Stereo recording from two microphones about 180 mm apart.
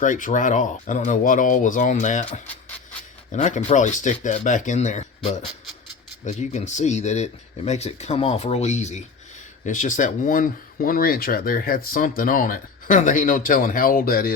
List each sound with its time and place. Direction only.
0.0 s speech: 45° left (ahead or behind)
2.5 s a sound: 5° left (ahead or behind)
3.3 s speech: 40° left (ahead or behind)
6.4 s speech: 40° left (ahead or behind)